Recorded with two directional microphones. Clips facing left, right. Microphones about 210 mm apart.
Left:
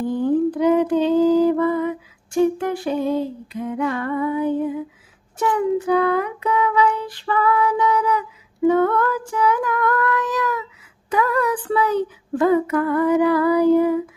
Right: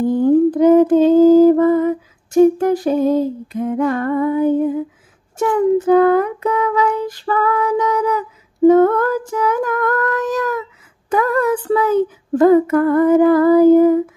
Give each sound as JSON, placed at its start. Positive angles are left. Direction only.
{"t": 0.0, "sound": "lullaby", "side_deg": -45}
{"t": 5.4, "sound": "child singing", "side_deg": -45}